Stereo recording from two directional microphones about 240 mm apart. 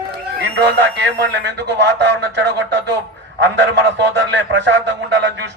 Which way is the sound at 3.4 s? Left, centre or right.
Right.